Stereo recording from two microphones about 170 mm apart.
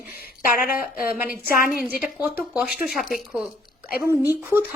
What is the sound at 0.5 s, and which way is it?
Speech, 60° left (ahead or behind).